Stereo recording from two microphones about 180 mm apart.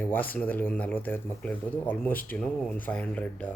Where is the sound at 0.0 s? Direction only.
10° left (ahead or behind).